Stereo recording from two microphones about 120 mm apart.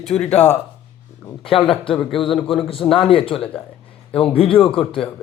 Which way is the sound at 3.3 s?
5° left (ahead or behind).